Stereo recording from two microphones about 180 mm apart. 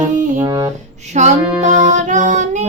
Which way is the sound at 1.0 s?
40° right (ahead or behind).